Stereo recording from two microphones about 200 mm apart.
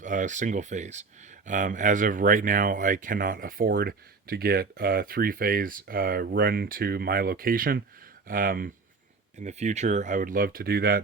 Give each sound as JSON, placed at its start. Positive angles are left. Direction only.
{"t": 0.0, "sound": "speech", "side_deg": -40}